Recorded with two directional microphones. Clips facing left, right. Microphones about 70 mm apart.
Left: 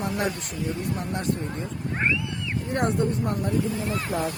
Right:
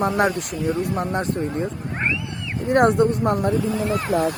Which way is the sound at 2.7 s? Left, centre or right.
Right.